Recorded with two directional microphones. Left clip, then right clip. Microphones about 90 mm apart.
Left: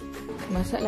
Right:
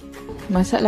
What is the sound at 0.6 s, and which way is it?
Speech, 90° right.